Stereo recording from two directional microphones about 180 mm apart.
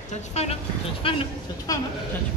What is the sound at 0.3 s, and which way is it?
A woman's voice, 35° left (ahead or behind).